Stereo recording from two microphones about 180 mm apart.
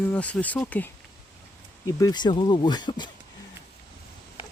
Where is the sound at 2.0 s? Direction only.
20° left (ahead or behind).